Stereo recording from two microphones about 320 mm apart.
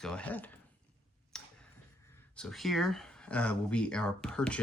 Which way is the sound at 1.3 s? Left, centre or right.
Centre.